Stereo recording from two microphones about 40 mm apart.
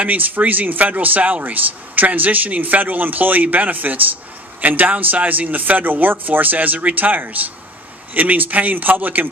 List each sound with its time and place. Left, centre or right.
0.0 s speech: right